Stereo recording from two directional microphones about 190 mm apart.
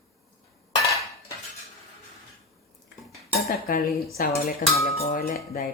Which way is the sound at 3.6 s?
50° left (ahead or behind).